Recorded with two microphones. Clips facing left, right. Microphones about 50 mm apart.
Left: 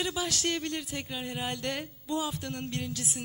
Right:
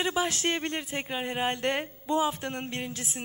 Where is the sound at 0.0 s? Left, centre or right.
Right.